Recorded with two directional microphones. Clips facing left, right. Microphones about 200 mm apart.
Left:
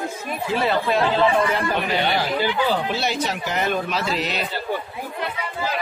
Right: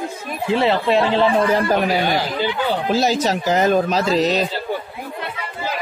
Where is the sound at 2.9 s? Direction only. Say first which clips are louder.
Right 6 dB; 40° right (ahead or behind).